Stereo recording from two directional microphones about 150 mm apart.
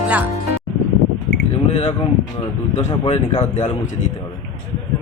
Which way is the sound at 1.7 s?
40° left (ahead or behind).